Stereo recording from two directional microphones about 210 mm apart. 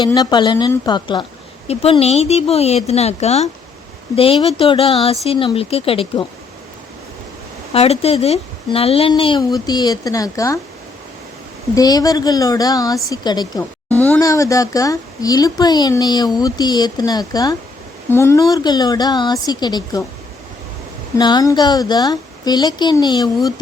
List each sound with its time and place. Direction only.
0.0 s speech: 20° left (ahead or behind)
7.7 s speech: 30° left (ahead or behind)
11.7 s speech: 15° left (ahead or behind)
13.9 s speech: 5° left (ahead or behind)
21.2 s speech: 20° left (ahead or behind)